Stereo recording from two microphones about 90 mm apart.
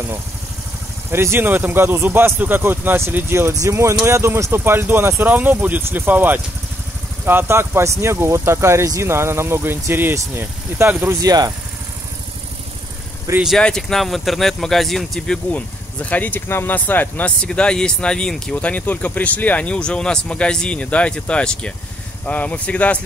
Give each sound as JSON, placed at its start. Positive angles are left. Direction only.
{"t": 1.1, "sound": "speech", "side_deg": -25}
{"t": 11.2, "sound": "speech", "side_deg": -45}
{"t": 13.6, "sound": "speech", "side_deg": 10}